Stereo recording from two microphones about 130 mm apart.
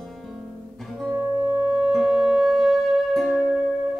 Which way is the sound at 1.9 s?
5° right (ahead or behind).